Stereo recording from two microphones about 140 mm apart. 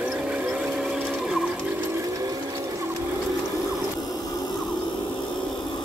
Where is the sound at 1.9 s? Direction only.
25° right (ahead or behind).